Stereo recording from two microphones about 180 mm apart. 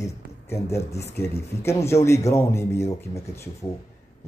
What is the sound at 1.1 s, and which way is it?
Speech, 65° left (ahead or behind).